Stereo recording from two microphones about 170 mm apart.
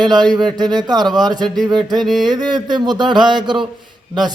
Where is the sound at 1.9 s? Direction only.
Centre (ahead or behind).